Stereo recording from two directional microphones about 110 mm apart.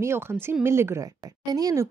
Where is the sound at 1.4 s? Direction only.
35° right (ahead or behind).